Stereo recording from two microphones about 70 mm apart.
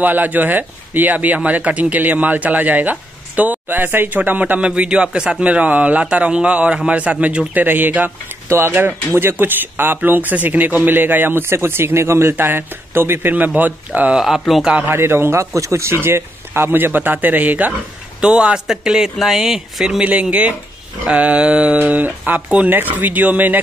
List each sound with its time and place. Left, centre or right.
0.0 s speech: right
14.1 s speech: centre
14.7 s speech: right
18.2 s speech: centre
20.0 s speech: centre